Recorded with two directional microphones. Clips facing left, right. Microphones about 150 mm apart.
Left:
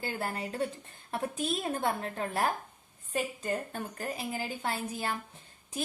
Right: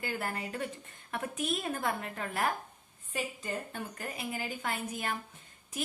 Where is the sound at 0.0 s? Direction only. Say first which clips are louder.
Left 1 dB; 30° left (ahead or behind).